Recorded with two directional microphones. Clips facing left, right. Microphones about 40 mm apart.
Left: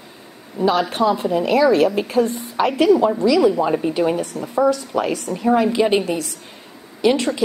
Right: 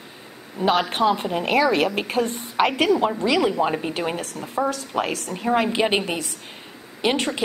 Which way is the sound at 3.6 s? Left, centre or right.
Centre.